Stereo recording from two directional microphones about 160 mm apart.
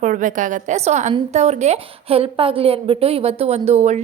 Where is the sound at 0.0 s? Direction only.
55° right (ahead or behind).